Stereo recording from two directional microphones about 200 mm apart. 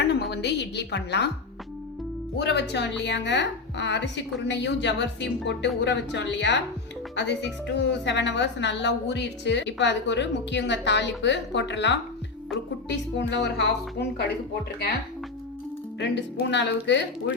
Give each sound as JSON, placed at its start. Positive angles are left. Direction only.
{"t": 0.0, "sound": "a woman's voice", "side_deg": 55}
{"t": 2.4, "sound": "a woman's voice", "side_deg": 60}
{"t": 16.0, "sound": "a woman's voice", "side_deg": 60}